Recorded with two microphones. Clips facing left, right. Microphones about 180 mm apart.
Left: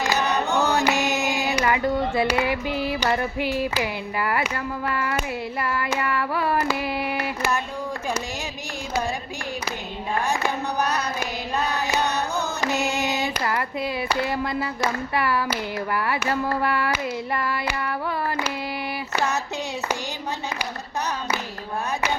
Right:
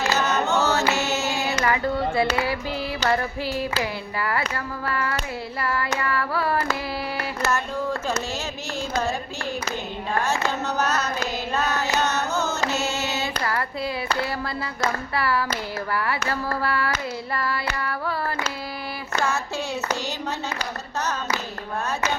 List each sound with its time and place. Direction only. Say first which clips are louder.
0.0 s chant: even; 15° left (ahead or behind)
5.7 s hands: right 1 dB; 15° left (ahead or behind)
7.2 s a sound: even; 15° left (ahead or behind)
10.2 s a sound: even; 15° left (ahead or behind)
16.0 s hands: left 2 dB; 15° left (ahead or behind)
19.1 s female singing: even; 20° left (ahead or behind)